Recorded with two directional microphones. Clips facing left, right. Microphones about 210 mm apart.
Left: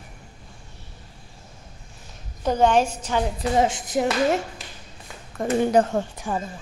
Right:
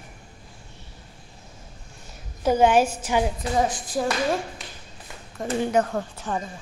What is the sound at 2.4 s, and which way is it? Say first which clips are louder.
Speech: right 1 dB; 10° right (ahead or behind).